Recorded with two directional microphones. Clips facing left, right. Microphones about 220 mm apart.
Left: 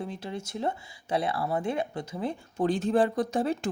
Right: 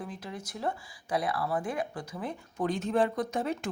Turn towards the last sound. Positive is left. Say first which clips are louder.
# left 4 dB
turn(degrees=30)  # may be behind; listen again after turning